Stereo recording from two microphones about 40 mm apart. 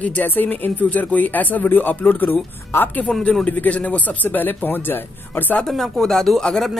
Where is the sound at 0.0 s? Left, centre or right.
Left.